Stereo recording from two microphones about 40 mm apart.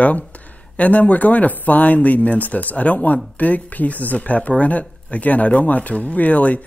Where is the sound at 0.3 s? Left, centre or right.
Left.